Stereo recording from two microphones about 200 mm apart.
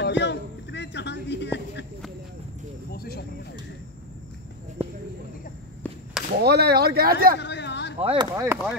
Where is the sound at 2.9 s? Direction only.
50° left (ahead or behind).